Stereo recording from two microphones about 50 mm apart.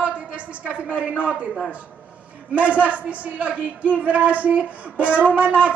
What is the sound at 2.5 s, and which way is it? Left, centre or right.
Speech, right.